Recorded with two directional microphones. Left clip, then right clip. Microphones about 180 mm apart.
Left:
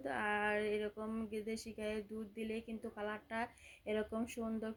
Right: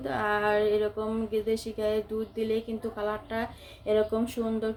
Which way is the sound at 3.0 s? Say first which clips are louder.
Right 10 dB; 40° left (ahead or behind).